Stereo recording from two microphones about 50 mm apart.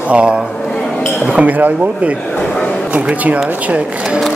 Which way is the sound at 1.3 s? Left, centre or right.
Right.